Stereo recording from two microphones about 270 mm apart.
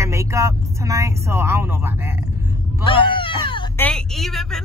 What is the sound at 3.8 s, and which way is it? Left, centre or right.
Speech, centre.